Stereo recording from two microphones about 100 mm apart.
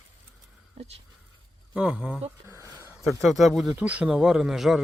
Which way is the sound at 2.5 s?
30° right (ahead or behind).